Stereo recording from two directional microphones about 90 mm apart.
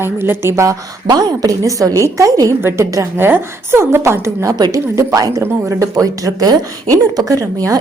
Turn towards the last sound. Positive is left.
turn(degrees=-40)  # may be behind; listen again after turning